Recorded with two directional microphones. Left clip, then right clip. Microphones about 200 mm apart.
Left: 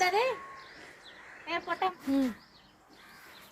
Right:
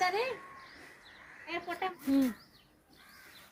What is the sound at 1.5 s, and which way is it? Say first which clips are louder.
Speech: left 5 dB; 20° left (ahead or behind).